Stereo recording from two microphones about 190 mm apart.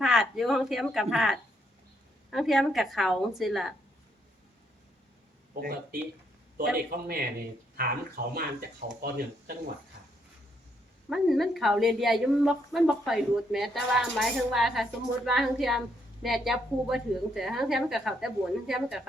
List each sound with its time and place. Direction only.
0.0 s a woman's voice: centre (ahead or behind)
5.5 s speech: 50° right (ahead or behind)
8.8 s speech: 65° right (ahead or behind)
11.1 s a woman's voice: centre (ahead or behind)